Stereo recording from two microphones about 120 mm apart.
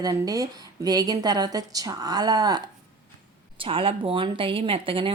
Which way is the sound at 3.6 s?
50° right (ahead or behind).